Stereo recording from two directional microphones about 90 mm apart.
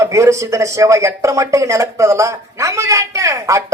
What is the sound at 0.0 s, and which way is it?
Speech, 35° right (ahead or behind).